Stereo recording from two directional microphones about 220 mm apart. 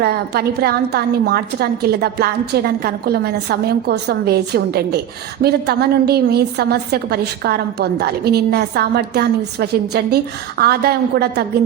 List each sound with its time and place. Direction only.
0.0 s a woman's voice: 45° right (ahead or behind)